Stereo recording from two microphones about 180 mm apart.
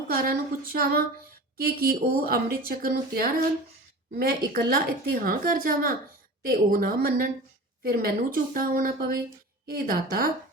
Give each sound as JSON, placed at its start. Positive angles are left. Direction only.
{"t": 0.1, "sound": "a woman's voice", "side_deg": -55}